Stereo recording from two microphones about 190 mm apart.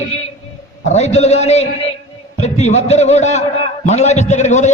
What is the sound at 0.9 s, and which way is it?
A man's voice, 35° left (ahead or behind).